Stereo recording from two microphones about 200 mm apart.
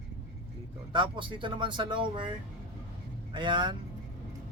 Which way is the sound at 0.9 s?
25° right (ahead or behind).